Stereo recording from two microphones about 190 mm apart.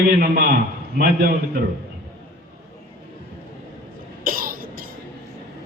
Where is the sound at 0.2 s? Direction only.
50° right (ahead or behind).